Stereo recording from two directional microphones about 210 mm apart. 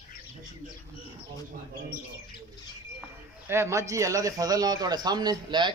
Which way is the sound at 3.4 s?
15° right (ahead or behind).